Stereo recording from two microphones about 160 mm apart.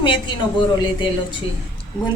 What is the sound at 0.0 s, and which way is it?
A woman's voice, 30° left (ahead or behind).